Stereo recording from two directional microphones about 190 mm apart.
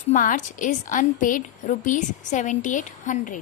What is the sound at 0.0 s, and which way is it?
A woman's voice, 45° left (ahead or behind).